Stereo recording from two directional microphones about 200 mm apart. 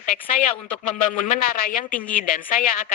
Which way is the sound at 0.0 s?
40° left (ahead or behind).